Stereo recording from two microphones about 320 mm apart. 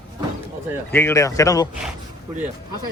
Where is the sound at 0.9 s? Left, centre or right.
Centre.